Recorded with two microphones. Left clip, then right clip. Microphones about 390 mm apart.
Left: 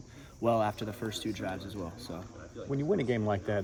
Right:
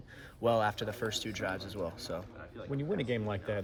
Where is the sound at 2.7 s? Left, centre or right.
Centre.